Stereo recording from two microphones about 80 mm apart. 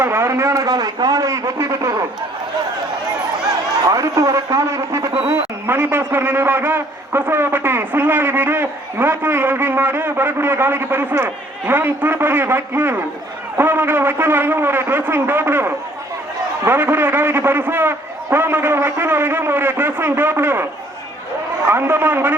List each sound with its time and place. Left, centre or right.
0.0 s a man's voice: right
3.8 s a man's voice: right
21.7 s a man's voice: right